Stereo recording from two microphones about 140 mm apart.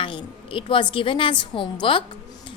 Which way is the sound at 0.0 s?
35° left (ahead or behind).